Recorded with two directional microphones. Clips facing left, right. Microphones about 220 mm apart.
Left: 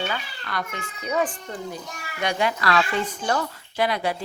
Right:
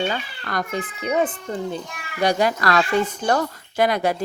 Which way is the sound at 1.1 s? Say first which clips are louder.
Right 3 dB; 25° right (ahead or behind).